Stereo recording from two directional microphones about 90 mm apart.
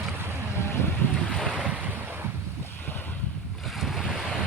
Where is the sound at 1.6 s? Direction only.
20° right (ahead or behind).